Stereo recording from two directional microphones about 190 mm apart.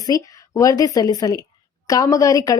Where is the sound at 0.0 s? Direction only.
20° left (ahead or behind).